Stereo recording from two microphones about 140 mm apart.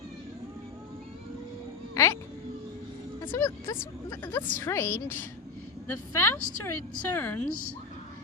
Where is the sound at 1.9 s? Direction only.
20° left (ahead or behind).